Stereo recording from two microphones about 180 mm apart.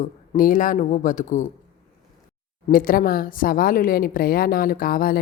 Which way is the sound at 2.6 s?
50° left (ahead or behind).